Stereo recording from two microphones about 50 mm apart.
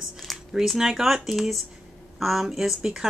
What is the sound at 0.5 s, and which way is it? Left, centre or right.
Speech, centre.